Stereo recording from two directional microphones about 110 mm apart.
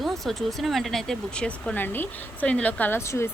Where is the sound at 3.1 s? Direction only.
25° left (ahead or behind).